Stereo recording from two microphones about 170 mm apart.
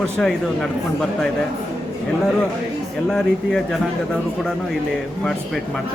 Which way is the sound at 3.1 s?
5° left (ahead or behind).